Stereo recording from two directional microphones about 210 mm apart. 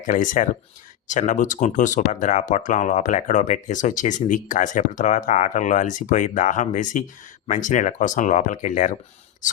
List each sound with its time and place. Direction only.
0.0 s speech: 35° left (ahead or behind)